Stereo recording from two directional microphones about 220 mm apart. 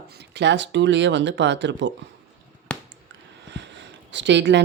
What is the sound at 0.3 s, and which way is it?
Speech, 50° right (ahead or behind).